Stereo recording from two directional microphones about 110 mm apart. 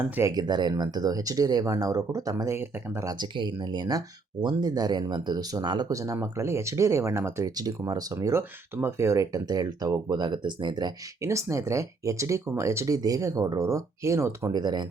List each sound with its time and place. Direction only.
0.2 s speech: 30° right (ahead or behind)
0.4 s speech: 40° right (ahead or behind)
3.2 s speech: 40° right (ahead or behind)
5.9 s speech: 30° right (ahead or behind)
7.5 s speech: 35° right (ahead or behind)
11.2 s speech: 25° right (ahead or behind)
14.5 s speech: 40° right (ahead or behind)